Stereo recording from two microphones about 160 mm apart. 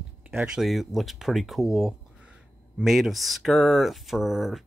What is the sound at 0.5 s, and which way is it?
Speech, centre (ahead or behind).